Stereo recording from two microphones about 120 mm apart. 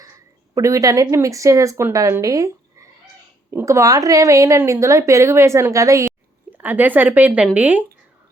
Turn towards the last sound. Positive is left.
turn(degrees=-15)  # may be behind; listen again after turning